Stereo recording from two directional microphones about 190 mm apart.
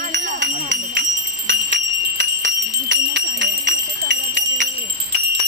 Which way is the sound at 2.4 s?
70° right (ahead or behind).